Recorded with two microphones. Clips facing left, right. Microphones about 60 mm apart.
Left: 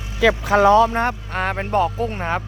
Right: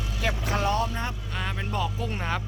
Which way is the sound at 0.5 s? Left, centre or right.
Left.